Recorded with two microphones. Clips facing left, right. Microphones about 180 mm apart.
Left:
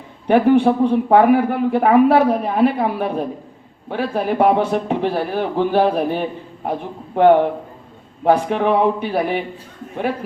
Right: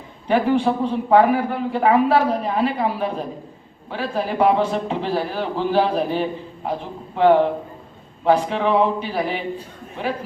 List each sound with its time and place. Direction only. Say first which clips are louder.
0.3 s a man's voice: left 5 dB; 55° left (ahead or behind)